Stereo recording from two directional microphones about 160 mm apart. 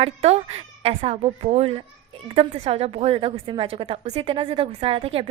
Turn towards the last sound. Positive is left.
turn(degrees=-35)  # may be behind; listen again after turning